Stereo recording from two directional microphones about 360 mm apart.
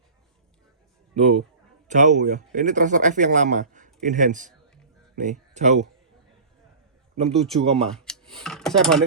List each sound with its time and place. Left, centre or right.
1.1 s a man's voice: centre
7.2 s speech: centre
7.9 s a sound: centre
8.4 s speech: centre